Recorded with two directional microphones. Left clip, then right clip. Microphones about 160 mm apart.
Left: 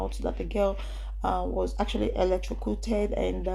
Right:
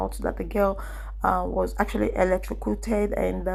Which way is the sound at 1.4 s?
15° right (ahead or behind).